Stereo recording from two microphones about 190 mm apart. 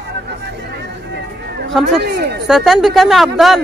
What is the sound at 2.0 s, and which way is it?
Speech, 60° right (ahead or behind).